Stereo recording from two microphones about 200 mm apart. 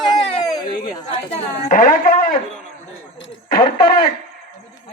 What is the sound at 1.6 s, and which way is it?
Speech, 40° left (ahead or behind).